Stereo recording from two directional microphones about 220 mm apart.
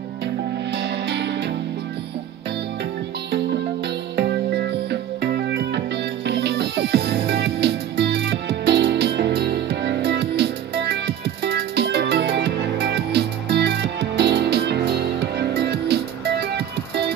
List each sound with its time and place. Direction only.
0.7 s music: 50° right (ahead or behind)
4.2 s music: 50° right (ahead or behind)